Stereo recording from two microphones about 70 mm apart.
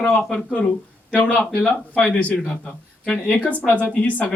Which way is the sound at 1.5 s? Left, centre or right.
Centre.